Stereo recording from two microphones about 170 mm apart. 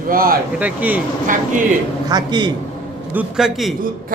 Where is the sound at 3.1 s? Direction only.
Centre (ahead or behind).